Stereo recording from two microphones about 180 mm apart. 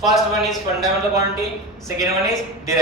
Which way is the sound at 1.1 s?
15° right (ahead or behind).